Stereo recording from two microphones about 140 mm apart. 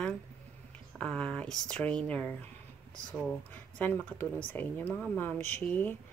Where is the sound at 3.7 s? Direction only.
10° left (ahead or behind).